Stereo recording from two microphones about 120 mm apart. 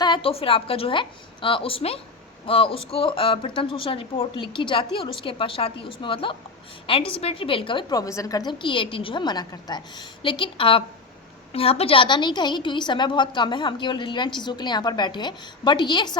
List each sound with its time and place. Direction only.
0.0 s a woman's voice: 45° left (ahead or behind)